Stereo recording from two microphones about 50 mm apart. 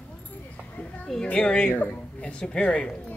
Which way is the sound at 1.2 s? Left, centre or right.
Left.